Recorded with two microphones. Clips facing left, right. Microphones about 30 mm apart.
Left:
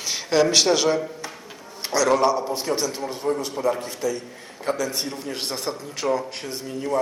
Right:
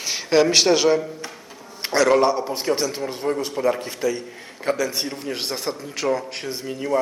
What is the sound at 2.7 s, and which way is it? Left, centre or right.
A man's voice, centre.